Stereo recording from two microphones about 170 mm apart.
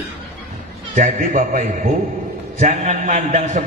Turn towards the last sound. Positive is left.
turn(degrees=-45)  # may be behind; listen again after turning